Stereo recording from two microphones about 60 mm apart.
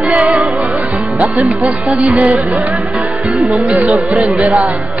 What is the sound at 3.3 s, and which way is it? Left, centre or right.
Speech, centre.